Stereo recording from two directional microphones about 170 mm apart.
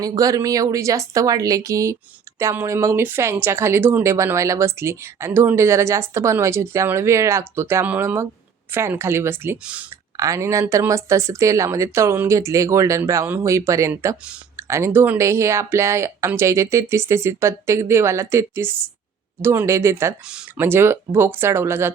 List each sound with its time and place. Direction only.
0.0 s a woman's voice: 20° right (ahead or behind)
20.2 s speech: 5° right (ahead or behind)